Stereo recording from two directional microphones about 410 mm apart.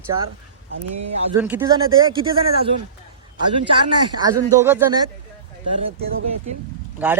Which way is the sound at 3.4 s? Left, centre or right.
Right.